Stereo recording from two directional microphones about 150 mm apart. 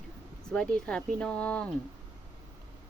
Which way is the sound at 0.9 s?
5° left (ahead or behind).